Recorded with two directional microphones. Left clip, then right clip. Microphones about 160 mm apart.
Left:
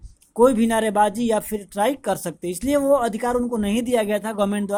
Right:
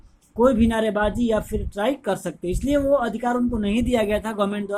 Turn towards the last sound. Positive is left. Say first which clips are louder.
# left 1 dB
turn(degrees=35)  # may be behind; listen again after turning